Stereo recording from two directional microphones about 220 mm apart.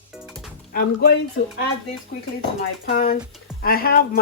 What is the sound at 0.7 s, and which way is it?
Speech, 45° left (ahead or behind).